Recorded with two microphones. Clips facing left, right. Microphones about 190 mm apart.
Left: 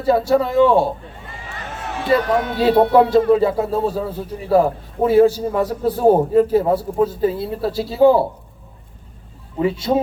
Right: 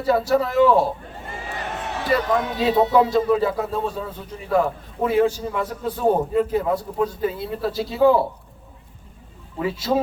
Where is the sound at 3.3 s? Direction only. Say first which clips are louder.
Left 5 dB; 30° left (ahead or behind).